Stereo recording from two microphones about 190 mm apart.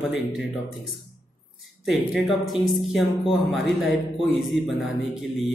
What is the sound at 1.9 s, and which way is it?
Speech, centre (ahead or behind).